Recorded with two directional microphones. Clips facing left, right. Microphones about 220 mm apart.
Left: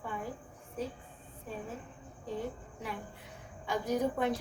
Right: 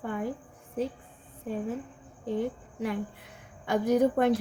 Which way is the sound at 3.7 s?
70° right (ahead or behind).